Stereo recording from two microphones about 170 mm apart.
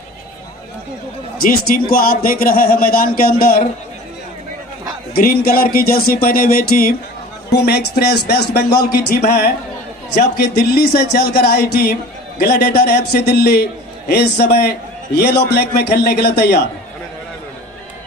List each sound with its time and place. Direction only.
1.4 s speech: 60° left (ahead or behind)
5.1 s speech: 60° left (ahead or behind)
10.1 s speech: 60° left (ahead or behind)